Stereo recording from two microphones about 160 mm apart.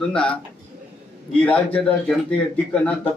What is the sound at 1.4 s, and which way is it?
Speech, 10° left (ahead or behind).